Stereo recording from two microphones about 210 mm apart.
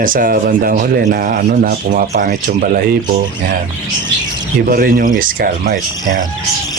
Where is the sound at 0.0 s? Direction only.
40° right (ahead or behind).